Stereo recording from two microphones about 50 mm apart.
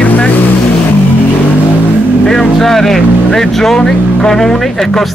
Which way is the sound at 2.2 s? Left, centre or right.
Centre.